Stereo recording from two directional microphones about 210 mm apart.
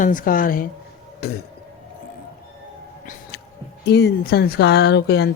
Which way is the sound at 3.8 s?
50° left (ahead or behind).